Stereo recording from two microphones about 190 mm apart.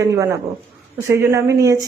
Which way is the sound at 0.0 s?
15° right (ahead or behind).